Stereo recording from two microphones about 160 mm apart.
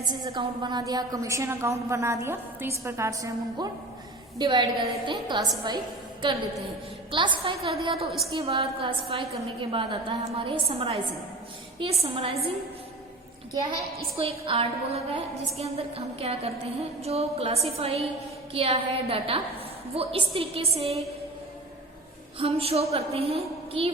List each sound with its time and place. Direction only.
0.0 s a woman's voice: 25° right (ahead or behind)
13.5 s a woman's voice: 25° right (ahead or behind)
14.2 s a woman's voice: 35° right (ahead or behind)
22.4 s a woman's voice: 35° right (ahead or behind)